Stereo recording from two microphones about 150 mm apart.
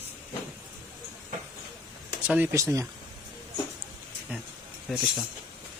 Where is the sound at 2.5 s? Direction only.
20° right (ahead or behind).